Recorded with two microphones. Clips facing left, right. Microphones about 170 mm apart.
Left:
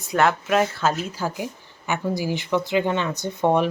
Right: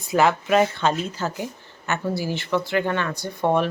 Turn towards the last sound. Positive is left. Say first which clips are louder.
# left 1 dB
turn(degrees=20)  # may be behind; listen again after turning